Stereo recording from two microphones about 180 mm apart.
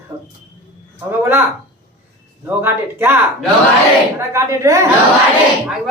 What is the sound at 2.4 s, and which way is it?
Speech, 10° right (ahead or behind).